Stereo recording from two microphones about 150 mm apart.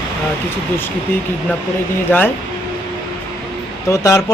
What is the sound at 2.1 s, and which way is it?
Speech, 15° left (ahead or behind).